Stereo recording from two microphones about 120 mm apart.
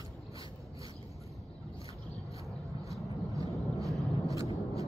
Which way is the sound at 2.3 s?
25° right (ahead or behind).